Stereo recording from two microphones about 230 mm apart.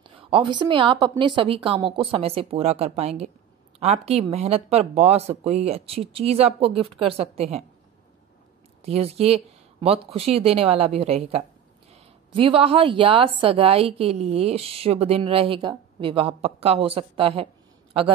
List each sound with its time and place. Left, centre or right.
0.0 s a woman's voice: right
8.8 s a woman's voice: right